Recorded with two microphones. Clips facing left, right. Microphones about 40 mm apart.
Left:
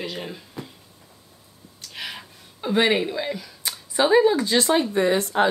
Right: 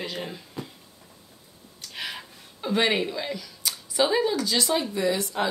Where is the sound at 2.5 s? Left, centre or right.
Centre; by 5.4 s left.